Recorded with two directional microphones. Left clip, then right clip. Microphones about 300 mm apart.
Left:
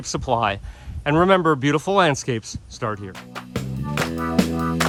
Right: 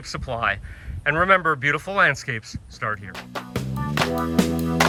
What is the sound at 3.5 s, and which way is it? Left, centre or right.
Music, centre.